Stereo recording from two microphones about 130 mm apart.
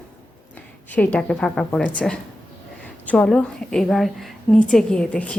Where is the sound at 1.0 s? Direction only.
10° left (ahead or behind).